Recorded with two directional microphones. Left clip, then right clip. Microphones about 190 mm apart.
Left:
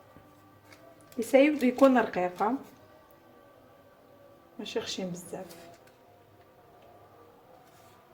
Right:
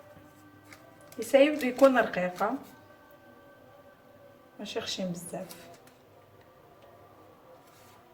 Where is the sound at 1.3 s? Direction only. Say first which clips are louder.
Even; 45° left (ahead or behind).